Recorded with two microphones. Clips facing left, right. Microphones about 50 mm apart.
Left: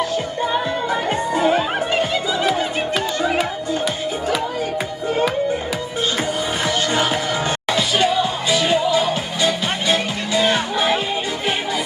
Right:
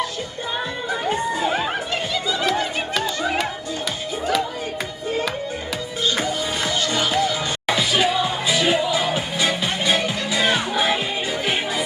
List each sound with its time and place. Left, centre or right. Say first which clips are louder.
2.4 s music: left 2 dB; centre
6.7 s music: left 4 dB; left
7.7 s music: left 1 dB; centre